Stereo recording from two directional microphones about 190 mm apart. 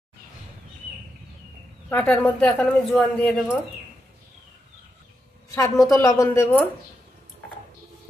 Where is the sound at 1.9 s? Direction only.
10° left (ahead or behind).